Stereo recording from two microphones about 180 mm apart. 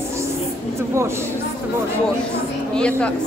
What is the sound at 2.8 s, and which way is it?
Speech, 5° left (ahead or behind).